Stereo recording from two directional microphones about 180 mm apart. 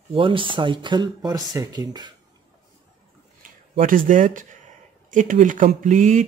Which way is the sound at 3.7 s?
50° right (ahead or behind).